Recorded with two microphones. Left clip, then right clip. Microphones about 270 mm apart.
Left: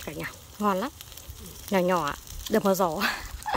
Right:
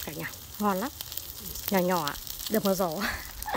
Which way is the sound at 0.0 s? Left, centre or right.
Centre.